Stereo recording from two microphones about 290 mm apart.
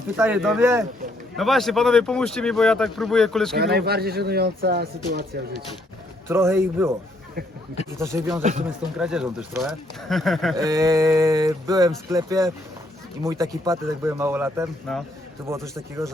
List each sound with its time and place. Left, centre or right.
0.2 s speech: centre
3.6 s speech: right
6.2 s speech: centre
7.9 s speech: centre
8.4 s speech: right
9.0 s speech: centre
10.6 s speech: centre